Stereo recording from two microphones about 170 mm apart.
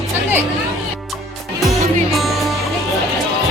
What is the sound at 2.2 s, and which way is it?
Music, centre (ahead or behind).